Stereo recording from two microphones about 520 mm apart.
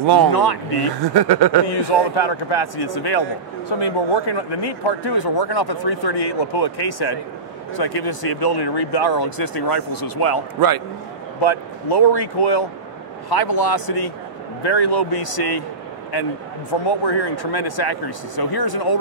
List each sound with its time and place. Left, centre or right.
0.0 s speech: right
0.3 s speech: left
1.1 s speech: right
1.7 s speech: left
11.4 s speech: left
17.0 s speech: left